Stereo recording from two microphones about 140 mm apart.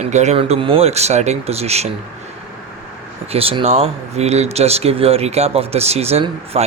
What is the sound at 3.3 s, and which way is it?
Speech, 45° right (ahead or behind).